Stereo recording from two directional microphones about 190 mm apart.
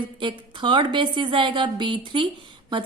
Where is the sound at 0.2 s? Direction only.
25° right (ahead or behind).